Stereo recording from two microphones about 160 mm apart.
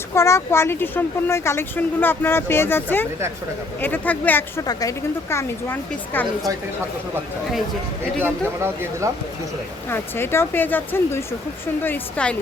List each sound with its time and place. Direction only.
0.1 s speech: 15° left (ahead or behind)
4.6 s speech: 25° left (ahead or behind)
8.2 s speech: 15° right (ahead or behind)
9.9 s speech: 15° left (ahead or behind)